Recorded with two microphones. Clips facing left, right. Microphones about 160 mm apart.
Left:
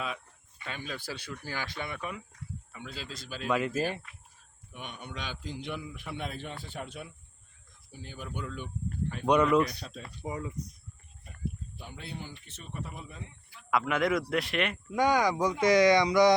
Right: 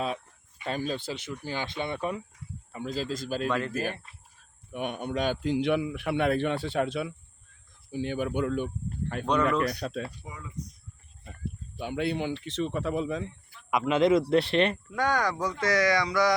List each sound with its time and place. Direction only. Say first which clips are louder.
0.6 s speech: right 9 dB; 35° right (ahead or behind)
0.9 s speech: right 5 dB; 20° right (ahead or behind); by 3.4 s 45° right (ahead or behind)
3.4 s speech: left 2 dB; 5° left (ahead or behind)
4.7 s speech: right 11 dB; 55° right (ahead or behind); by 7.1 s 90° right
7.9 s speech: right 12 dB; 70° right (ahead or behind)
9.2 s speech: left 2 dB; 15° left (ahead or behind)
9.6 s speech: right 11 dB; 65° right (ahead or behind)
10.2 s speech: left 8 dB; 30° left (ahead or behind)
11.8 s speech: right 14 dB; 75° right (ahead or behind)
13.7 s speech: right 5 dB; 20° right (ahead or behind)
14.8 s speech: left 2 dB; 15° left (ahead or behind)